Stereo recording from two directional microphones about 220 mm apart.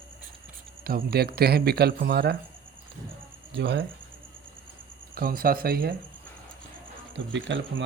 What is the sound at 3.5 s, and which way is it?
Speech, 50° right (ahead or behind).